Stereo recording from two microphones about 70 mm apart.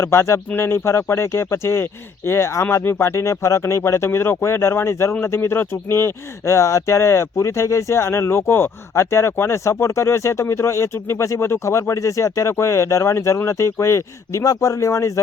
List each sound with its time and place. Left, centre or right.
0.0 s speech: left